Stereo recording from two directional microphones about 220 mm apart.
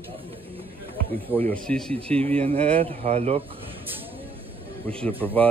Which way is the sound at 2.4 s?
25° right (ahead or behind).